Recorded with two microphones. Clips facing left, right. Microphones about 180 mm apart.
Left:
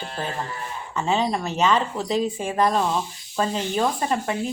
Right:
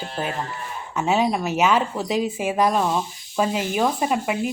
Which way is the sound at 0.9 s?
10° right (ahead or behind).